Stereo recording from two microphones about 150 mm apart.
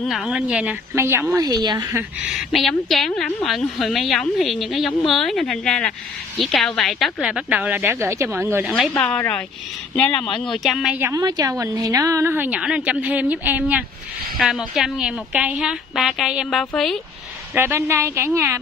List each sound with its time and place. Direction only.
0.0 s a woman's voice: centre (ahead or behind); by 2.0 s 30° right (ahead or behind)
2.2 s a woman's voice: centre (ahead or behind)
7.2 s a woman's voice: 5° right (ahead or behind)
8.6 s a woman's voice: 5° left (ahead or behind)
11.0 s a woman's voice: 20° right (ahead or behind); by 17.0 s centre (ahead or behind)
17.6 s a woman's voice: 15° right (ahead or behind)